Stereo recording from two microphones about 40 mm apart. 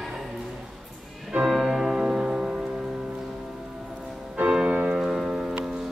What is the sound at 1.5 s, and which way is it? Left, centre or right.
Music, centre.